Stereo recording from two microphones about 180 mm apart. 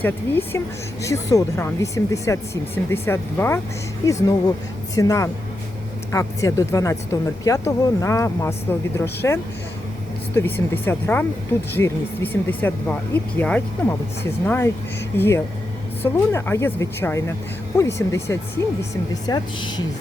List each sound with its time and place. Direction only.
0.0 s speech: 10° left (ahead or behind)
16.0 s speech: 15° left (ahead or behind)